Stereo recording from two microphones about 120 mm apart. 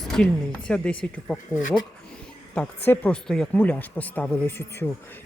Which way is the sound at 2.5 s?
10° left (ahead or behind).